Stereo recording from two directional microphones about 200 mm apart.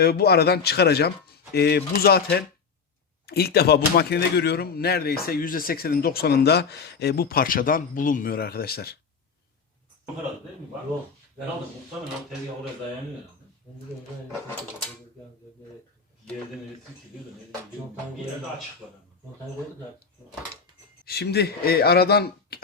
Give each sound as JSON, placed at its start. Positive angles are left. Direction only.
{"t": 0.0, "sound": "a man's voice", "side_deg": 50}
{"t": 21.0, "sound": "a man's voice", "side_deg": 50}